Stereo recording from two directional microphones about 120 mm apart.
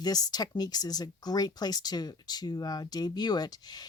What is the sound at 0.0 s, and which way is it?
Speech, 35° left (ahead or behind).